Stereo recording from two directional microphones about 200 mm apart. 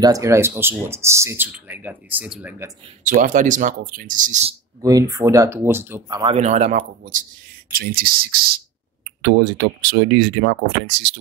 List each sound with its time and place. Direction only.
0.0 s speech: 15° right (ahead or behind)
3.0 s speech: 40° right (ahead or behind)
4.8 s speech: 15° right (ahead or behind)
6.3 s speech: 35° right (ahead or behind)
7.7 s speech: 45° right (ahead or behind)